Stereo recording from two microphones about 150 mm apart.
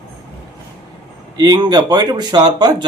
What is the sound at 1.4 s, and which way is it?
Speech, 25° right (ahead or behind).